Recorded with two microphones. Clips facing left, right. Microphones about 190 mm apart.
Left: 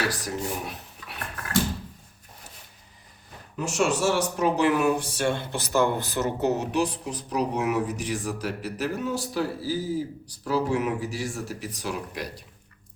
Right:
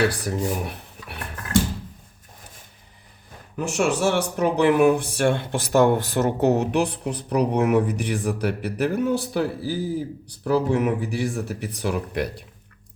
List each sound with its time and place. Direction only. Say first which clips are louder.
0.1 s dishes: right 5 dB; 55° right (ahead or behind)
3.6 s speech: right 3 dB; 60° right (ahead or behind)